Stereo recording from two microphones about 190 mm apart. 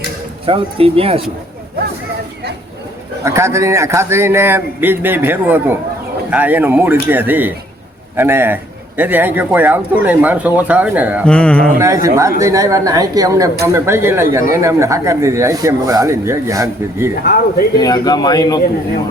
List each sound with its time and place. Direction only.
0.4 s speech: 30° right (ahead or behind)
3.2 s speech: 15° right (ahead or behind)
11.3 s a sound: 5° left (ahead or behind)
12.0 s speech: 15° right (ahead or behind)
17.7 s a man's voice: 20° left (ahead or behind)